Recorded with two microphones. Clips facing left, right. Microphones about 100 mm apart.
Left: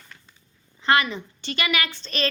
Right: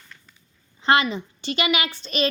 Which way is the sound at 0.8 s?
20° right (ahead or behind).